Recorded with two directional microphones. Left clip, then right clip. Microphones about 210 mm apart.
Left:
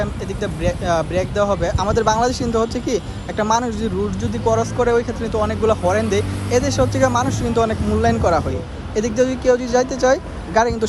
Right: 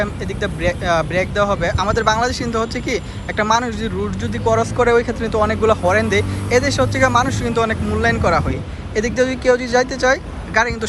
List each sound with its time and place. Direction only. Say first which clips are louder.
0.0 s speech: right 2 dB; 15° left (ahead or behind)